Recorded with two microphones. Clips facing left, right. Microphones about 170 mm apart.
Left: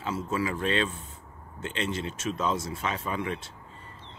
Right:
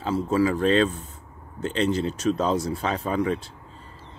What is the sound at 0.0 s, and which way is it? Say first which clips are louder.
Speech: right 8 dB; 35° right (ahead or behind).